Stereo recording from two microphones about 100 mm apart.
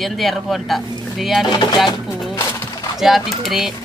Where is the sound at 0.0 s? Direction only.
Centre (ahead or behind).